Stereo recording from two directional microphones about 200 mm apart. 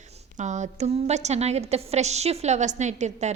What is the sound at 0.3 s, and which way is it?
A woman's voice, 35° right (ahead or behind).